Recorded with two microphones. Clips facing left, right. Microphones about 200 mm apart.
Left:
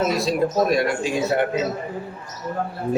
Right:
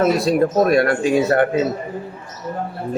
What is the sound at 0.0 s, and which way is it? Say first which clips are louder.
Speech: right 5 dB; 55° right (ahead or behind).